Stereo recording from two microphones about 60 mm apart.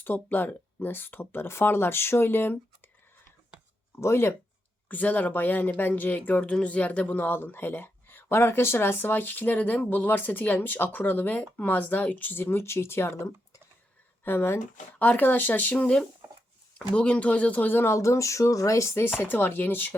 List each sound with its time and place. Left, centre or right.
0.0 s speech: left
4.0 s speech: left
4.9 s speech: left
14.3 s speech: left
14.9 s speech: left
16.7 s speech: centre; by 17.9 s left
17.9 s speech: left
19.2 s speech: left